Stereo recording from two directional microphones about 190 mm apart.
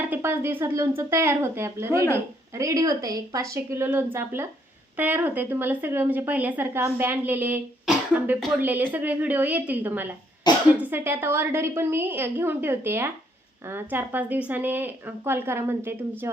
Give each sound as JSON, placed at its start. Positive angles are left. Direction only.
{"t": 0.0, "sound": "speech", "side_deg": -10}